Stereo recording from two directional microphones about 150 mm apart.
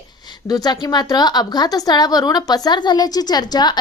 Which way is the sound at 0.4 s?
25° left (ahead or behind).